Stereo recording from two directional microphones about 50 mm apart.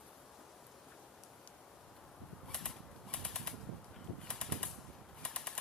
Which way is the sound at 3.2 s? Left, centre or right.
Centre.